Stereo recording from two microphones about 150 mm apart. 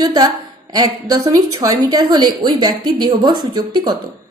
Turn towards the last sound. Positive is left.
turn(degrees=-25)  # may be behind; listen again after turning